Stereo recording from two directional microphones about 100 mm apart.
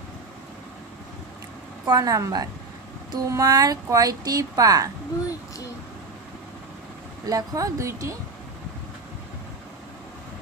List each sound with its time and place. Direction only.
1.9 s speech: 35° right (ahead or behind)
7.2 s speech: 35° right (ahead or behind)